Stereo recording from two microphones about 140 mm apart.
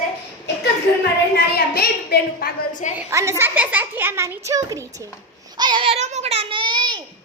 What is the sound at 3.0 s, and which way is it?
A child's voice, 20° right (ahead or behind).